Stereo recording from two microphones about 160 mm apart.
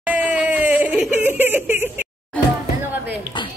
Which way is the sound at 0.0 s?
10° right (ahead or behind).